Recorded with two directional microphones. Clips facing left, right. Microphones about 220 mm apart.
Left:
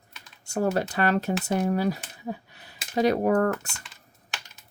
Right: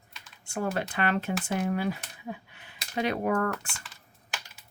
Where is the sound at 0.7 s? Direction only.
40° left (ahead or behind).